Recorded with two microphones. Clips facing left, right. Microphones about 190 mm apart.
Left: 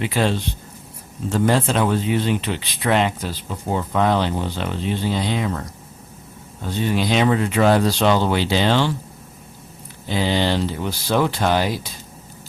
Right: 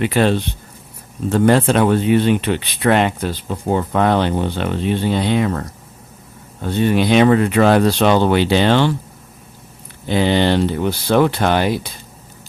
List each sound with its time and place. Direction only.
0.0 s speech: 60° right (ahead or behind)
10.1 s speech: 60° right (ahead or behind)